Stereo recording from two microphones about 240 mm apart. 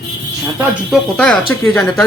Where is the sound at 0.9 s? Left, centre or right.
Centre.